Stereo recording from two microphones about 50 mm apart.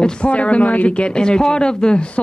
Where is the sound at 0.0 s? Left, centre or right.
Centre.